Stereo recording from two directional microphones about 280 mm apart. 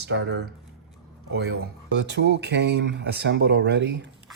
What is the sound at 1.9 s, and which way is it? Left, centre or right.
Speech, right.